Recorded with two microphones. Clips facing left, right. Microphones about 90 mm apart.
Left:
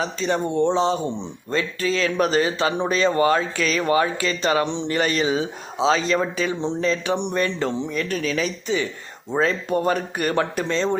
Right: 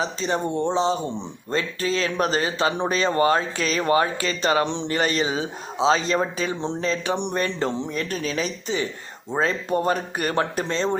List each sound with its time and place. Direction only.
0.0 s speech: 30° right (ahead or behind)
4.6 s speech: 60° right (ahead or behind)
4.9 s speech: 35° right (ahead or behind)